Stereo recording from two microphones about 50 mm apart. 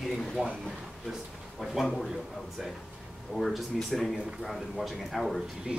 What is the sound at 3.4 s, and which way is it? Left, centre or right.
Speech, centre.